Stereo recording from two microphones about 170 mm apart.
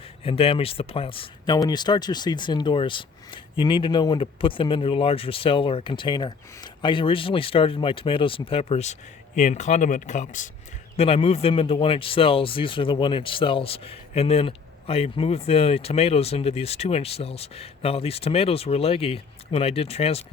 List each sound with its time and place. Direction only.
0.3 s speech: 35° left (ahead or behind)
10.9 s speech: 35° left (ahead or behind)